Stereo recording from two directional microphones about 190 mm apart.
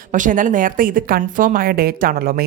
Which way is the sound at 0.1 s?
45° right (ahead or behind).